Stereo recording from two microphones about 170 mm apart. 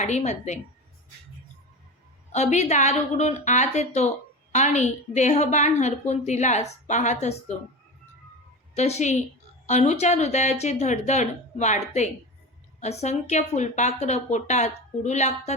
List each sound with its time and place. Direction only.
0.0 s a woman's voice: 45° left (ahead or behind)
2.3 s a woman's voice: 40° left (ahead or behind)
8.7 s a woman's voice: 40° left (ahead or behind)